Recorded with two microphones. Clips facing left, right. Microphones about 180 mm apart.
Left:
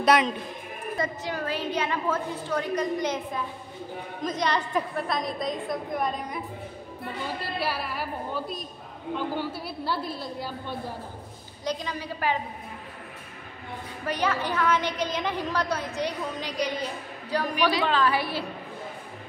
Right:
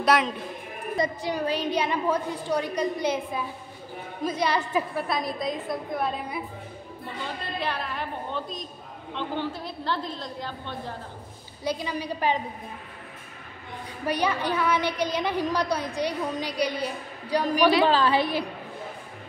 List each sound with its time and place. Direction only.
0.0 s a woman's voice: centre (ahead or behind)
0.9 s a woman's voice: 15° right (ahead or behind)
7.5 s a woman's voice: 5° left (ahead or behind)
11.6 s a woman's voice: 10° right (ahead or behind)
14.0 s a woman's voice: 15° right (ahead or behind)
17.8 s a woman's voice: 30° right (ahead or behind)